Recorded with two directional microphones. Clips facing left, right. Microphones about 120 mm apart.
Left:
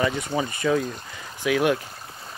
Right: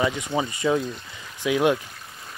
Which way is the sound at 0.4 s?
20° right (ahead or behind).